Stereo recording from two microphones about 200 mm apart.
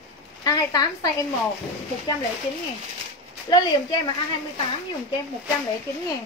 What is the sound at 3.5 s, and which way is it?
Speech, 20° left (ahead or behind).